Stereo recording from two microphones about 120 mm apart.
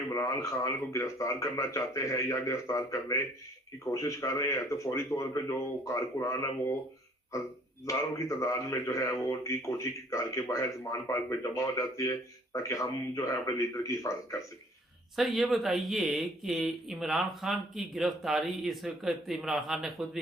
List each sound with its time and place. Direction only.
0.1 s speech: 25° left (ahead or behind)
7.9 s speech: 25° left (ahead or behind)
15.1 s speech: centre (ahead or behind)